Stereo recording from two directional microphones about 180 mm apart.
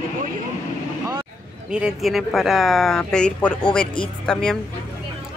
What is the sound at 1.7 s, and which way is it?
Speech, 5° right (ahead or behind).